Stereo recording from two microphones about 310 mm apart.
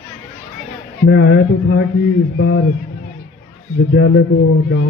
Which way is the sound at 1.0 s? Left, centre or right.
Left.